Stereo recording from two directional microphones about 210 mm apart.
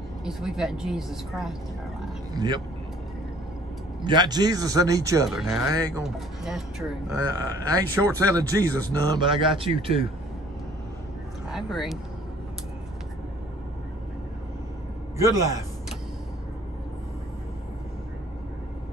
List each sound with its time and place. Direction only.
0.2 s a woman's voice: centre (ahead or behind)
2.3 s speech: 20° right (ahead or behind)
4.0 s speech: 20° right (ahead or behind)
5.3 s a woman's voice: 5° right (ahead or behind)
5.7 s speech: 15° right (ahead or behind)
6.0 s a woman's voice: centre (ahead or behind)
7.6 s speech: 15° right (ahead or behind)
11.5 s speech: centre (ahead or behind)
15.1 s speech: 15° right (ahead or behind)